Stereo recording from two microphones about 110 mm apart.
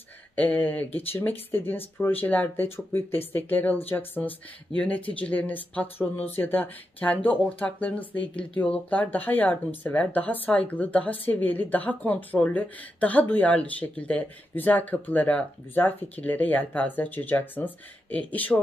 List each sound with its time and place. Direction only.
0.4 s speech: 15° left (ahead or behind)